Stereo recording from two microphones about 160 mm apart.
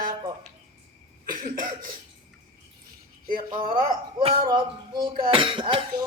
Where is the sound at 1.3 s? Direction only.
60° right (ahead or behind).